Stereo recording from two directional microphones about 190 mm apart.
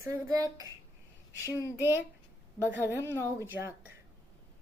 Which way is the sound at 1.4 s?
15° left (ahead or behind).